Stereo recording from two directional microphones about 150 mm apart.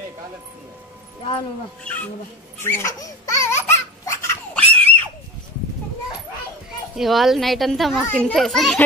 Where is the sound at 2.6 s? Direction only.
15° left (ahead or behind).